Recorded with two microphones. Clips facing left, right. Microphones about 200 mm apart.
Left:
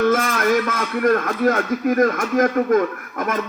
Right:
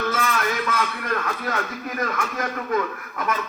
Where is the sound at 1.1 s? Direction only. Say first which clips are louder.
Left 5 dB; 45° left (ahead or behind).